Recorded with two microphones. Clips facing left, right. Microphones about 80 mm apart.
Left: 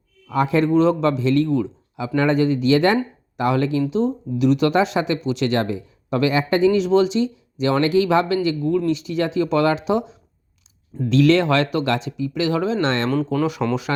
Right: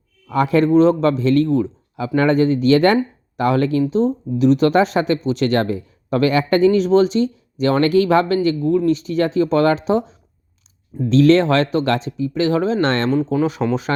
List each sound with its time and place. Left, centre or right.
0.3 s speech: right
0.7 s speech: right
13.1 s speech: centre